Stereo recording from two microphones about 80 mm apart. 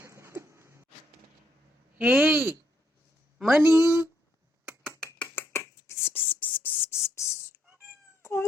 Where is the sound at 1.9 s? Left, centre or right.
Centre.